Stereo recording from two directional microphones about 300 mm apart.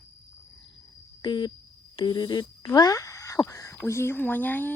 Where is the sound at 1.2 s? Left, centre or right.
Centre.